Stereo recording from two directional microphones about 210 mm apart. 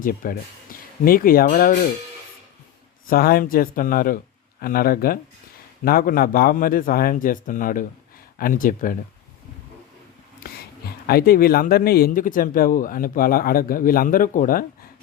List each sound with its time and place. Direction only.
0.0 s speech: 40° left (ahead or behind)
3.1 s speech: 45° left (ahead or behind)
10.4 s speech: 45° left (ahead or behind)